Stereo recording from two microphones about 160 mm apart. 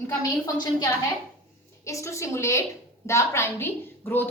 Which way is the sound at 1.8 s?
20° left (ahead or behind).